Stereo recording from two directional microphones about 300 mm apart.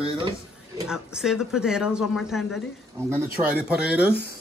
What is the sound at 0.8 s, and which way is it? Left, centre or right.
Speech, centre.